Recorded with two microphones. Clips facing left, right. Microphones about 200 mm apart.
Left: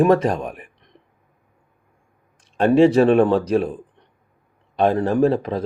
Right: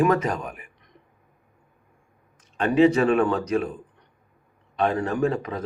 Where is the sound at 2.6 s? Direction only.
30° left (ahead or behind).